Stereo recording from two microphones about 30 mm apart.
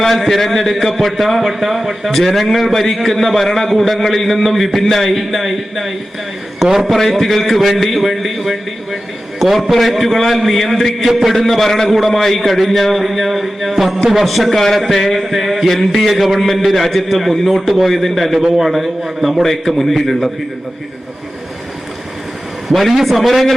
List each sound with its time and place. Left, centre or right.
0.0 s speech: centre
2.1 s speech: centre
7.1 s speech: centre
15.7 s a man's voice: centre
22.7 s speech: centre